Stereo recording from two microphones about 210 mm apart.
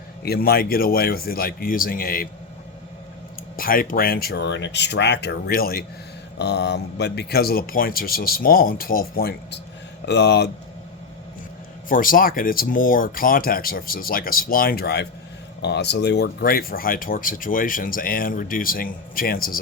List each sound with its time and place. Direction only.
0.2 s speech: 45° left (ahead or behind)
3.6 s speech: 45° left (ahead or behind)
11.9 s speech: 40° left (ahead or behind)